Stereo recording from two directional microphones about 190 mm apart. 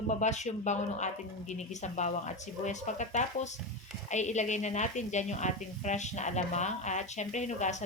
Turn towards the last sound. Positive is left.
turn(degrees=40)  # may be behind; listen again after turning